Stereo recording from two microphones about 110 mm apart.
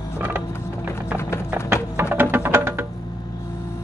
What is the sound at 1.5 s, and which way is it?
Music, 15° right (ahead or behind).